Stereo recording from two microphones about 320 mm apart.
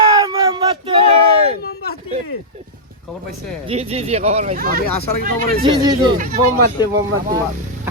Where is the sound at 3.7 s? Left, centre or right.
Centre.